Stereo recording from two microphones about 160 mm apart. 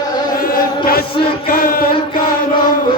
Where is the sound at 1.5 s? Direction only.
65° left (ahead or behind).